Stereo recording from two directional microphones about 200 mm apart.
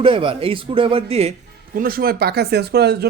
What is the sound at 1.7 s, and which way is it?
Speech, 45° right (ahead or behind).